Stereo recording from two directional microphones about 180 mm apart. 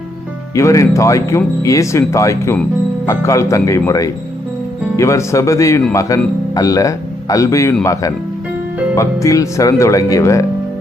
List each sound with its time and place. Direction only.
0.5 s speech: 15° left (ahead or behind)